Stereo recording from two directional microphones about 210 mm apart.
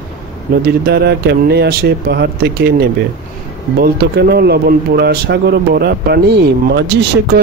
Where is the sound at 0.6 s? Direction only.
50° right (ahead or behind).